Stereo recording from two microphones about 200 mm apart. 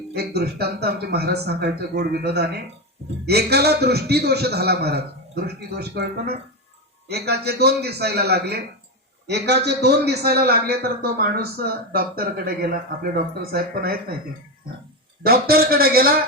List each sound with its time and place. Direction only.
0.1 s a man's voice: 55° right (ahead or behind)
15.2 s a man's voice: 50° right (ahead or behind)